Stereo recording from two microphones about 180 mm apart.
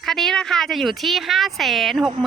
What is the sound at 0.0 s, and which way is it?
A woman's voice, centre (ahead or behind).